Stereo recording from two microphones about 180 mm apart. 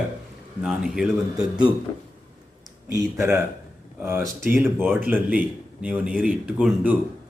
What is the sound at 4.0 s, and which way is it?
A man's voice, 10° right (ahead or behind).